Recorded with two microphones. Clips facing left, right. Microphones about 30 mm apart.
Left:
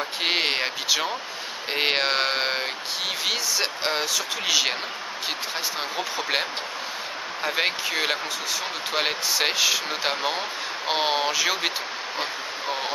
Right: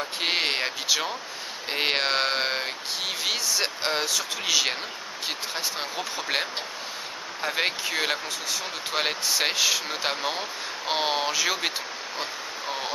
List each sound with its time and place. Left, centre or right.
0.2 s speech: centre
5.8 s speech: centre
7.4 s speech: centre
12.2 s a sound: centre